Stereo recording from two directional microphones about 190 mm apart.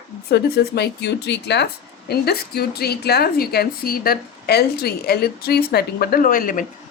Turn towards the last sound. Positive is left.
turn(degrees=45)  # may be behind; listen again after turning